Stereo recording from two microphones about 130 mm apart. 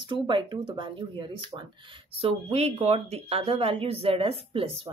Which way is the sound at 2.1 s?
50° right (ahead or behind).